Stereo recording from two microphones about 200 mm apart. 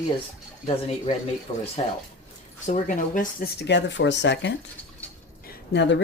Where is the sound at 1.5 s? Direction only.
25° left (ahead or behind).